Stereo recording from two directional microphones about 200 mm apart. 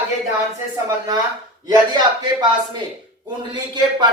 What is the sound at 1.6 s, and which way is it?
Speech, 20° right (ahead or behind).